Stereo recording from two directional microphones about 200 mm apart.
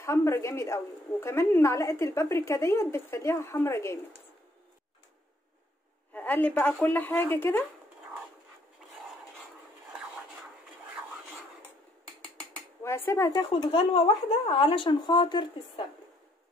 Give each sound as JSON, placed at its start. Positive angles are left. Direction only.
{"t": 0.0, "sound": "a woman's voice", "side_deg": 15}
{"t": 6.1, "sound": "a woman's voice", "side_deg": 10}
{"t": 12.8, "sound": "speech", "side_deg": 15}